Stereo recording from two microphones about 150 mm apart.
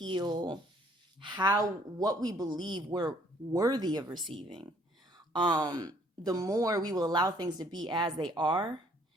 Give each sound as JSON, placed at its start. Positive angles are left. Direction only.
{"t": 0.0, "sound": "speech", "side_deg": -30}